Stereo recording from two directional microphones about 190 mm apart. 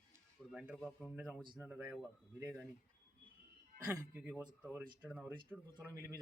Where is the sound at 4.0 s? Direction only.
10° right (ahead or behind).